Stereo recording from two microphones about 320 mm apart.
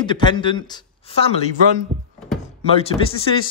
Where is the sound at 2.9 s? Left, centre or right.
Centre.